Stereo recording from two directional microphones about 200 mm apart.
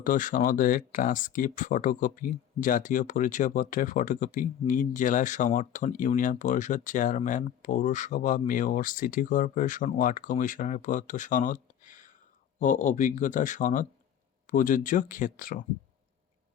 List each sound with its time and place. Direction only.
0.0 s speech: 40° left (ahead or behind)